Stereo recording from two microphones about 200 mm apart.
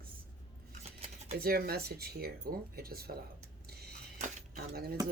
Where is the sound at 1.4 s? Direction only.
50° right (ahead or behind).